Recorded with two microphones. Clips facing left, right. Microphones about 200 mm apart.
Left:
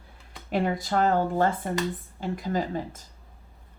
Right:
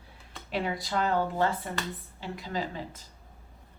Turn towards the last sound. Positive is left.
turn(degrees=45)  # may be behind; listen again after turning